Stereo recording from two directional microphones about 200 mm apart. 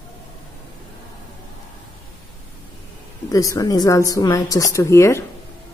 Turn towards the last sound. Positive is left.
turn(degrees=15)  # may be behind; listen again after turning